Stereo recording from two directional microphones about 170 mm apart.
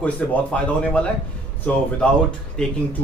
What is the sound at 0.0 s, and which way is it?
Speech, 10° left (ahead or behind).